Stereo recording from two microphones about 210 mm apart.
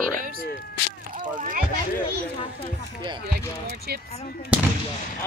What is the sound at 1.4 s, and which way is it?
Rowboat, 40° right (ahead or behind).